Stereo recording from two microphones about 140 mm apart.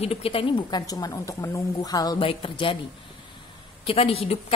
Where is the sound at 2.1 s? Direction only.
40° left (ahead or behind).